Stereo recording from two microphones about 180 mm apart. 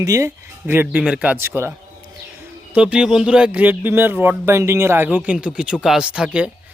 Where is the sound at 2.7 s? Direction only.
5° right (ahead or behind).